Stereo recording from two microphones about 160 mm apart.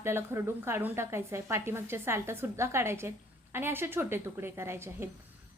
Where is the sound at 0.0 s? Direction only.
15° right (ahead or behind).